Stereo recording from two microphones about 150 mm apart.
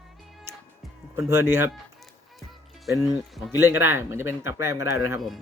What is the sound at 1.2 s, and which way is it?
Speech, 20° right (ahead or behind).